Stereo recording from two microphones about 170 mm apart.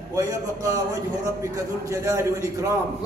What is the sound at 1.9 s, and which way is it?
Speech, 20° right (ahead or behind).